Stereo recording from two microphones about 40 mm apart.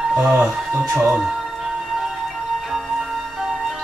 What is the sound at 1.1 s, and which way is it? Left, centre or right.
Music, centre.